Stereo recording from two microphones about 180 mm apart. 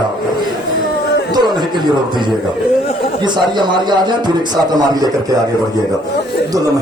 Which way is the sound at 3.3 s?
25° right (ahead or behind).